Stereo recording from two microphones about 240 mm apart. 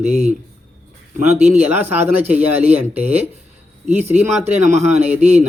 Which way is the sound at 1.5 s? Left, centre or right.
Centre.